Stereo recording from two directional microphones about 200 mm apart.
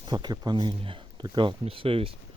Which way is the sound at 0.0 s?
20° right (ahead or behind).